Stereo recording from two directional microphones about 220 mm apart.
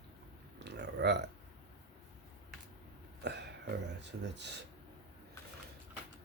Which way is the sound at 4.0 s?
50° right (ahead or behind).